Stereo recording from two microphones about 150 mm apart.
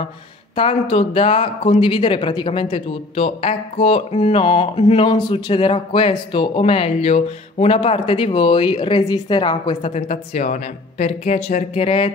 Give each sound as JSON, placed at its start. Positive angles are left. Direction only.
{"t": 0.6, "sound": "speech", "side_deg": 35}
{"t": 9.8, "sound": "speech", "side_deg": 50}